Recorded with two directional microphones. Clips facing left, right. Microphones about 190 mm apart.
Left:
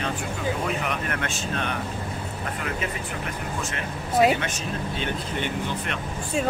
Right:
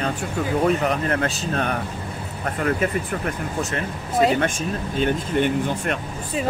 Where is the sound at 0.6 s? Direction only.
35° right (ahead or behind).